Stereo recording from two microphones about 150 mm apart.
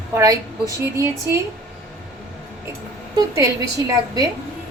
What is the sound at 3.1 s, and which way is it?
Speech, 25° right (ahead or behind).